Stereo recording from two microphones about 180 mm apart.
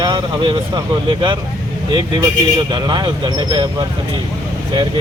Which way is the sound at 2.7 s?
25° right (ahead or behind).